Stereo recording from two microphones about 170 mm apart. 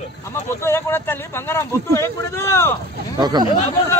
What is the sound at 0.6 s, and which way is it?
Speech, 15° left (ahead or behind).